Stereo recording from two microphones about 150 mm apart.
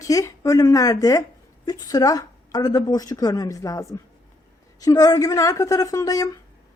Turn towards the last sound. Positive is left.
turn(degrees=25)  # may be behind; listen again after turning